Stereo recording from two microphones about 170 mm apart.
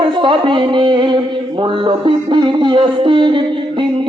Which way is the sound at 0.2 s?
30° right (ahead or behind).